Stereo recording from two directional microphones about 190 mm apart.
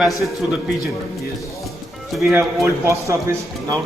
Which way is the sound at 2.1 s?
Centre (ahead or behind).